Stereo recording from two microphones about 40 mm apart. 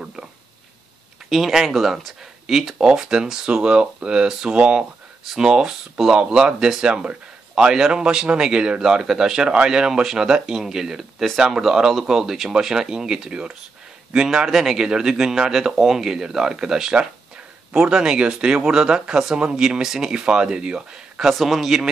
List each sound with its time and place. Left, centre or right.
1.3 s a man's voice: centre
3.6 s a man's voice: right; by 6.1 s centre
6.1 s a man's voice: right
21.3 s a man's voice: centre